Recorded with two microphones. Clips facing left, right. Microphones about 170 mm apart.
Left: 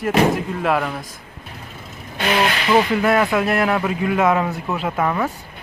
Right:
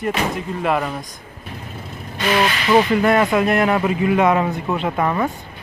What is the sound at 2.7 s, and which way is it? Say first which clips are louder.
Speech: right 2 dB; centre (ahead or behind).